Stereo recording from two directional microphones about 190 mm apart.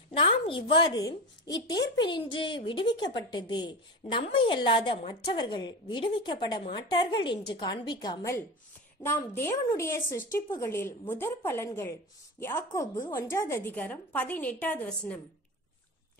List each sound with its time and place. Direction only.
0.1 s a woman's voice: 25° left (ahead or behind)
1.5 s a woman's voice: 65° left (ahead or behind)
2.0 s a woman's voice: 25° left (ahead or behind); by 15.1 s 10° left (ahead or behind)